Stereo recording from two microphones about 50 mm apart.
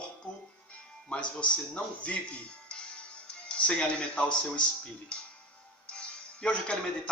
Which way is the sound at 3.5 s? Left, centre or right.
Centre.